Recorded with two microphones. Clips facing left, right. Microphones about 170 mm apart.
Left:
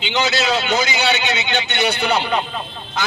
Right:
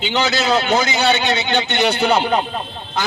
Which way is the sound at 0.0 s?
45° right (ahead or behind).